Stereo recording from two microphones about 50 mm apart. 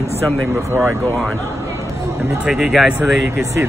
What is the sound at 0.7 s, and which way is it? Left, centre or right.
Speech, right.